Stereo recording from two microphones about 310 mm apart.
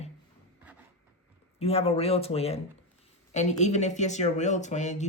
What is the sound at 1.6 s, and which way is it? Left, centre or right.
Speech, centre.